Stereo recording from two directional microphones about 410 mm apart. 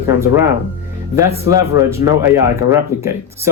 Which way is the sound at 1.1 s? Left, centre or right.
Centre.